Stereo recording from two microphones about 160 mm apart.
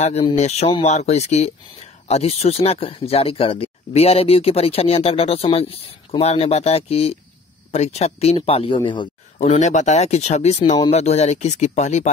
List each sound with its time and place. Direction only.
0.0 s speech: 40° left (ahead or behind)
9.4 s speech: 50° left (ahead or behind)